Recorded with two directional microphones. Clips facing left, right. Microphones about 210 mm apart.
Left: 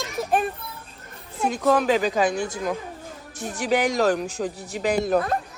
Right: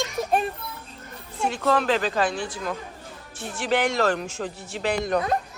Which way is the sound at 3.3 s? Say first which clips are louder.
Left 3 dB; 40° left (ahead or behind).